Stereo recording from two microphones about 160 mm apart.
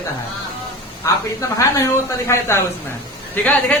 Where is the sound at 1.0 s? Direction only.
20° left (ahead or behind).